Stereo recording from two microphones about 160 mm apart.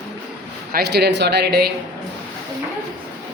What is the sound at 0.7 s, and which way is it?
Speech, 90° right.